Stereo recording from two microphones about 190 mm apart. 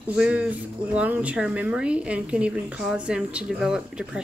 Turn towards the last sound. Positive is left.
turn(degrees=-5)  # may be behind; listen again after turning